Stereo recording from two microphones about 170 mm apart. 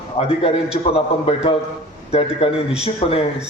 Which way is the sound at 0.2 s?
35° left (ahead or behind).